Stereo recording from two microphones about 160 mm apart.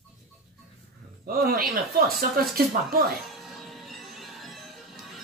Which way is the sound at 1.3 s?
65° right (ahead or behind).